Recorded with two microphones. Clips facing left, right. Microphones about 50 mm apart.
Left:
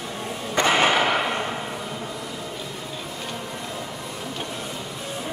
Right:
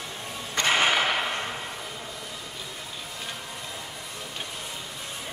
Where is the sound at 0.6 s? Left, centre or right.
Left.